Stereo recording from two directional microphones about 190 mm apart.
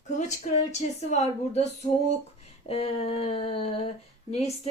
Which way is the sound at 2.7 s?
30° left (ahead or behind).